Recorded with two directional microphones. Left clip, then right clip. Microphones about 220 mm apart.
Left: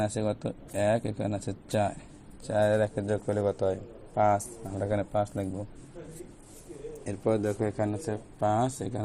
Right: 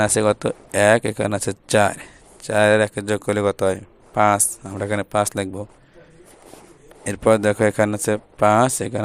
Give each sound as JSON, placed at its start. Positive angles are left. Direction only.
{"t": 0.0, "sound": "speech", "side_deg": -50}
{"t": 3.7, "sound": "speech", "side_deg": -65}
{"t": 4.6, "sound": "speech", "side_deg": -55}
{"t": 7.0, "sound": "speech", "side_deg": -55}